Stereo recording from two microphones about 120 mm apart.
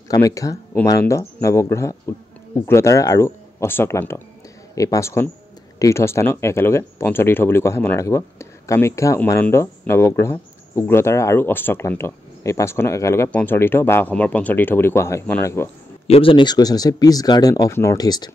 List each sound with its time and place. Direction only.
0.1 s speech: 25° left (ahead or behind)
13.3 s speech: 10° left (ahead or behind)
16.1 s speech: 50° left (ahead or behind)